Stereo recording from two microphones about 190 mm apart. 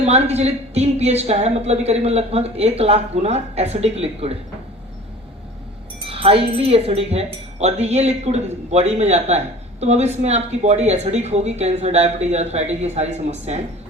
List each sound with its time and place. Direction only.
0.0 s a woman's voice: 35° right (ahead or behind)
6.1 s a woman's voice: 30° right (ahead or behind)